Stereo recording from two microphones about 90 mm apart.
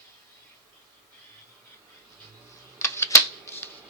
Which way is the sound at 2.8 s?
30° left (ahead or behind).